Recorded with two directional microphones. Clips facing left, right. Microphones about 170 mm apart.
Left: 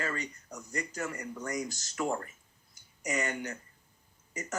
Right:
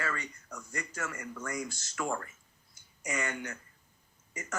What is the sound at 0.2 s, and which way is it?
Speech, 20° left (ahead or behind).